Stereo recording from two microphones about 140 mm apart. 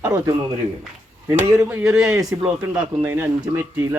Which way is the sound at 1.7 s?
20° right (ahead or behind).